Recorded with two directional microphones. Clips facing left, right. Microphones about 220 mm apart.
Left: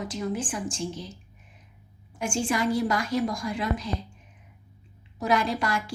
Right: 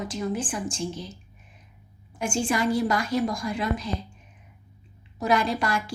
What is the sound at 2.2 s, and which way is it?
Speech, 30° right (ahead or behind).